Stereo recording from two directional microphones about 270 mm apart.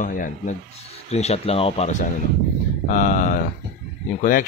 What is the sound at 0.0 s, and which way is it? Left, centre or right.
Speech, left.